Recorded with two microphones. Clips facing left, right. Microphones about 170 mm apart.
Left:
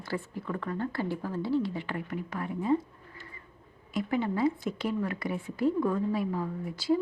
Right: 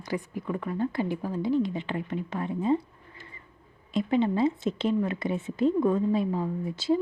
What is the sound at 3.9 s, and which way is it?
Speech, 25° right (ahead or behind).